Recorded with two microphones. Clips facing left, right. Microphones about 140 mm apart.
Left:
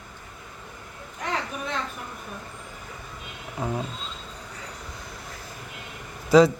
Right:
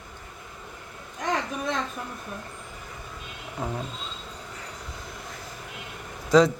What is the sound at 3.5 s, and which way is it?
Speech, 5° left (ahead or behind).